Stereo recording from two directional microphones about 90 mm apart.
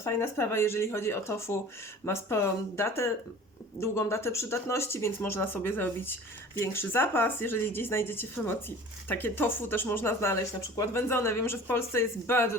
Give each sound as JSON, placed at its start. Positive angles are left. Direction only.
{"t": 0.0, "sound": "speech", "side_deg": 30}